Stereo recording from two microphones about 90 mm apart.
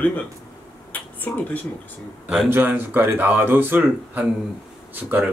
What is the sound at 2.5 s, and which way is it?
Speech, 20° right (ahead or behind).